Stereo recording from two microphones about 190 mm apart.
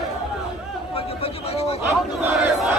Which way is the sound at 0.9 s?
30° left (ahead or behind).